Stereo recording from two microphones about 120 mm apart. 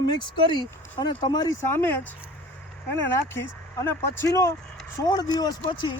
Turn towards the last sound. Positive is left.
turn(degrees=40)  # may be behind; listen again after turning